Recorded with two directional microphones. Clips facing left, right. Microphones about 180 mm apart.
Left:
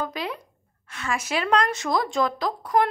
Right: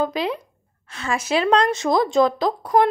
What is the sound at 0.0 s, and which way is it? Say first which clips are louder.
Speech: right 7 dB; 25° right (ahead or behind).